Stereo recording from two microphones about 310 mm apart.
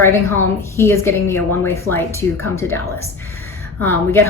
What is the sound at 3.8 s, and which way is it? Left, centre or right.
Speech, centre.